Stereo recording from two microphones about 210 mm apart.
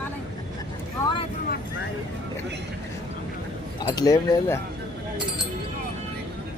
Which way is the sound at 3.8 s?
20° left (ahead or behind).